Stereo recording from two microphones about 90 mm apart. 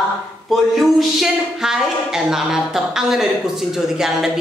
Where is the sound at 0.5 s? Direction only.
Centre (ahead or behind).